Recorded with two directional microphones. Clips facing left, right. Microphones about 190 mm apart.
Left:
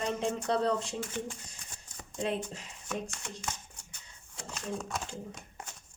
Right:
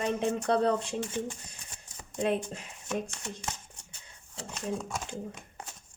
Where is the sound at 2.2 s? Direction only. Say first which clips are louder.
Right 4 dB; 55° right (ahead or behind).